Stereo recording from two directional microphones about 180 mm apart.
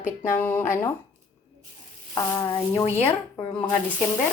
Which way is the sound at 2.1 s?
20° left (ahead or behind).